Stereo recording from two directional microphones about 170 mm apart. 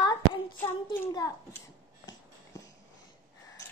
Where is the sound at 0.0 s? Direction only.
25° left (ahead or behind).